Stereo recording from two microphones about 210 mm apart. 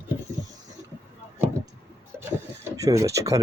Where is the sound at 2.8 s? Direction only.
15° right (ahead or behind).